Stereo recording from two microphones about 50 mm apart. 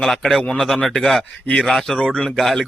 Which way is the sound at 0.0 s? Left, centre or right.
Centre.